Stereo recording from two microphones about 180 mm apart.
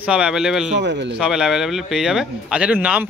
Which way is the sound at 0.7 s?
75° right (ahead or behind).